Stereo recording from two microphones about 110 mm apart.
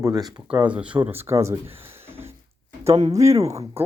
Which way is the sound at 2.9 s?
35° right (ahead or behind).